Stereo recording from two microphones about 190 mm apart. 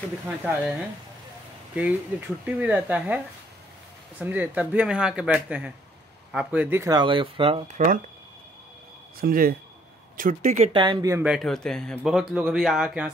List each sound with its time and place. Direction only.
1.8 s speech: 10° right (ahead or behind)
4.2 s speech: 10° right (ahead or behind); by 8.0 s 40° right (ahead or behind)
9.2 s speech: 50° right (ahead or behind)
10.7 s speech: 25° right (ahead or behind)
11.2 s speech: centre (ahead or behind)